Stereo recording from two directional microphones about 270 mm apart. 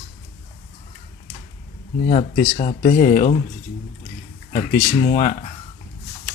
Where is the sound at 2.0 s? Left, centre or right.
Left.